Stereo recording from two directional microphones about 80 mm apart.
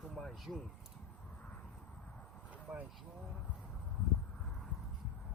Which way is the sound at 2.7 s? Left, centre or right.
Centre.